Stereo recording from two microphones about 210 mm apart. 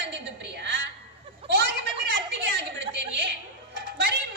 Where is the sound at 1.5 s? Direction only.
55° right (ahead or behind).